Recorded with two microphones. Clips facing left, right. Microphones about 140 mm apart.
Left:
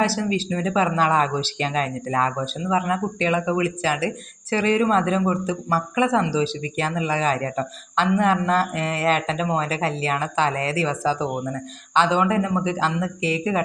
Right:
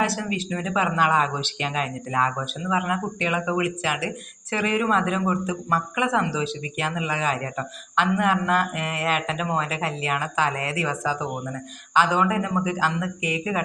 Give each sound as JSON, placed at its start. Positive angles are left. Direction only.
{"t": 0.0, "sound": "speech", "side_deg": 30}